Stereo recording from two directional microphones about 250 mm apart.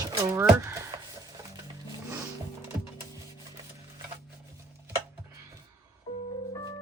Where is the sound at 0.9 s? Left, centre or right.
Centre.